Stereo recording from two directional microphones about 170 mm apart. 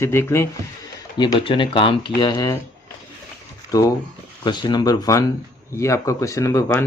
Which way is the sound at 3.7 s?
20° left (ahead or behind).